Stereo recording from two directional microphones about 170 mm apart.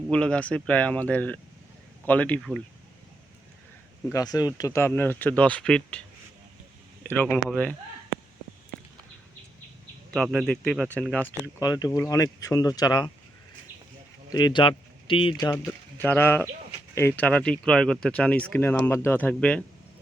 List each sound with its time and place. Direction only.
0.1 s speech: 5° left (ahead or behind)
4.1 s speech: 20° left (ahead or behind); by 6.0 s 5° left (ahead or behind)
7.0 s speech: 10° left (ahead or behind)
10.3 s speech: 5° left (ahead or behind)
11.6 s speech: 20° left (ahead or behind)
14.3 s a man's voice: 25° left (ahead or behind)
15.4 s speech: 15° left (ahead or behind)